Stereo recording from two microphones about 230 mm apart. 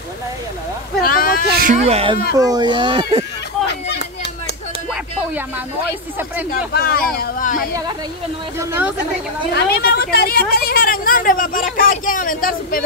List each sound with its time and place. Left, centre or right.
1.0 s a sound: left
1.6 s speech: right
2.3 s speech: centre
6.7 s a woman's voice: left
8.5 s a woman's voice: centre
9.5 s a woman's voice: left